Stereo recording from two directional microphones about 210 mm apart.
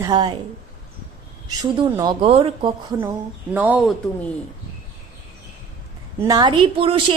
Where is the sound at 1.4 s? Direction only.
20° right (ahead or behind).